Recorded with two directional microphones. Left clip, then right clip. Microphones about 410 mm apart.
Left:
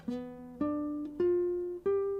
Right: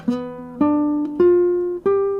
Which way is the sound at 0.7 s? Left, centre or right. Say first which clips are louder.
Right 16 dB; centre.